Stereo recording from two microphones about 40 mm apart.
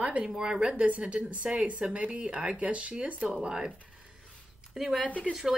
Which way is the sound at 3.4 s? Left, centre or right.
Centre.